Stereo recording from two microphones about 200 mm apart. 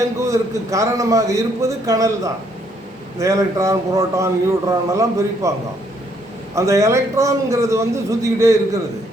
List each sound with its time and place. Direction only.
0.2 s a man's voice: 15° right (ahead or behind)
6.5 s a man's voice: 15° right (ahead or behind)